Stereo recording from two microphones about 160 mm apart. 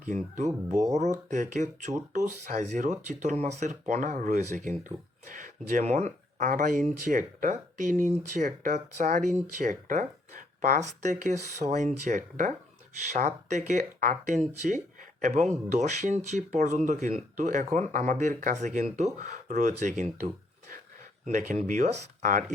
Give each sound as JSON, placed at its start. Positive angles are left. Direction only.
{"t": 0.0, "sound": "speech", "side_deg": -50}